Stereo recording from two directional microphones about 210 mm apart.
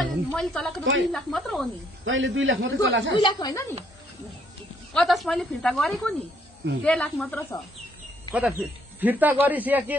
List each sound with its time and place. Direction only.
0.0 s speech: centre (ahead or behind)
2.0 s a man's voice: 65° right (ahead or behind)
3.2 s a woman's voice: 20° left (ahead or behind)
4.9 s speech: centre (ahead or behind)
8.3 s speech: 5° right (ahead or behind)